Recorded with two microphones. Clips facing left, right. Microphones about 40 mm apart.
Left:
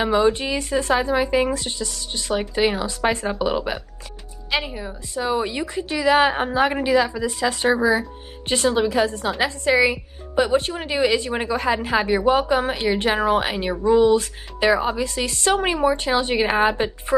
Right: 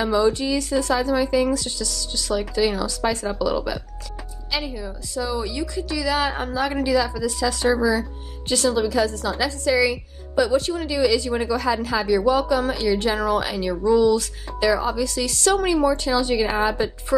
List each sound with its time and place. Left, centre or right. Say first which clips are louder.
0.0 s a woman's voice: left 1 dB; left